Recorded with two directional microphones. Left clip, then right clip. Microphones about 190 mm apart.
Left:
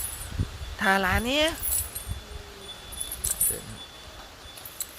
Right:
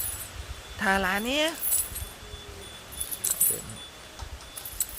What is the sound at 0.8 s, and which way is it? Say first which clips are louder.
Speech: left 2 dB; 15° left (ahead or behind).